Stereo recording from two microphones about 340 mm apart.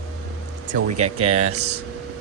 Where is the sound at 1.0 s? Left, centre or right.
Centre.